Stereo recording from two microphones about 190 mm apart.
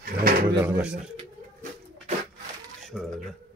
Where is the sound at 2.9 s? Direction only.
Centre (ahead or behind).